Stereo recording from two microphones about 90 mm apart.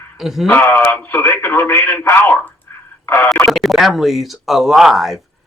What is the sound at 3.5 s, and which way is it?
Speech, centre (ahead or behind).